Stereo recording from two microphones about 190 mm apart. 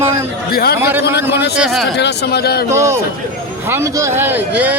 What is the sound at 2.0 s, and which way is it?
Speech, 60° left (ahead or behind).